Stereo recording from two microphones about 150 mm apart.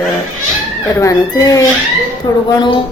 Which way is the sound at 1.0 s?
20° left (ahead or behind).